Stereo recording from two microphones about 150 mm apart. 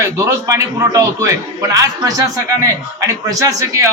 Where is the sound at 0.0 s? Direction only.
20° right (ahead or behind).